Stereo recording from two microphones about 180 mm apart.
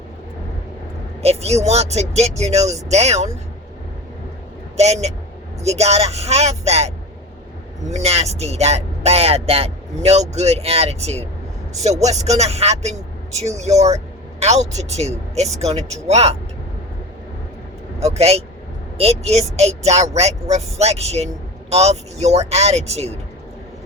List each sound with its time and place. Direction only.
1.2 s speech: 35° right (ahead or behind)
4.8 s speech: 35° right (ahead or behind)
18.0 s speech: 35° right (ahead or behind)